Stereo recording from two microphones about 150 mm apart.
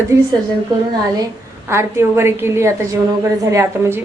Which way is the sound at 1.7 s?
15° right (ahead or behind).